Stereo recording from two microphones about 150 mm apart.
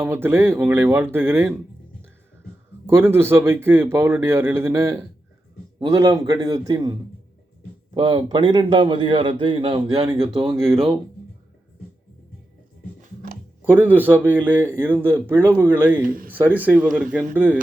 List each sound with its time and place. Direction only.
0.0 s speech: 15° right (ahead or behind)
2.8 s a man's voice: 15° right (ahead or behind)
7.9 s a man's voice: 30° right (ahead or behind)
13.7 s speech: 10° right (ahead or behind)
16.0 s speech: 70° right (ahead or behind)
16.3 s speech: 10° right (ahead or behind)